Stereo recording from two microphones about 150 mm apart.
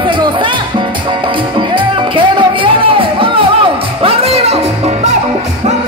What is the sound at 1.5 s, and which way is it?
Music, 35° right (ahead or behind).